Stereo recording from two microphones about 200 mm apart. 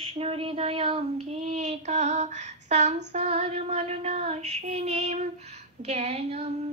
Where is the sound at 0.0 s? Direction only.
30° right (ahead or behind).